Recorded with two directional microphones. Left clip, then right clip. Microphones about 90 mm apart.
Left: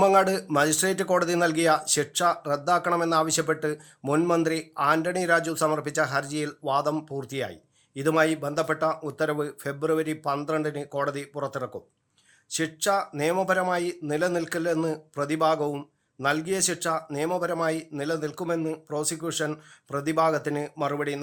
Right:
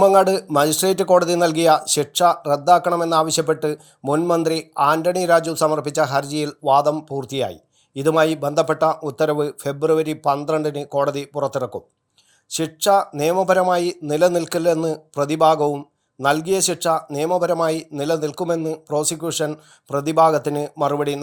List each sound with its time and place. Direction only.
0.2 s speech: 25° right (ahead or behind)
4.1 s speech: centre (ahead or behind)
4.4 s speech: 30° right (ahead or behind)